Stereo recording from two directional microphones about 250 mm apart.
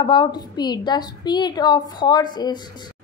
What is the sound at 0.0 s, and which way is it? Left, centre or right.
A woman's voice, centre.